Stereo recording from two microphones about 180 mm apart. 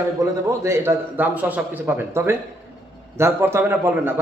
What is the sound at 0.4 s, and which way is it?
A man's voice, 15° right (ahead or behind).